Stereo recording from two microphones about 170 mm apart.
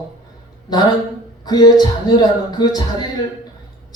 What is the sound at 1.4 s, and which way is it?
Speech, 25° left (ahead or behind).